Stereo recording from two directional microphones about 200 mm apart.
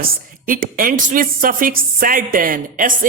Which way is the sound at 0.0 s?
45° right (ahead or behind).